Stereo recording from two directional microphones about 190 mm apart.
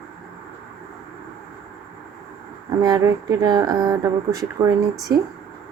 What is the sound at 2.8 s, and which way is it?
Speech, 20° right (ahead or behind).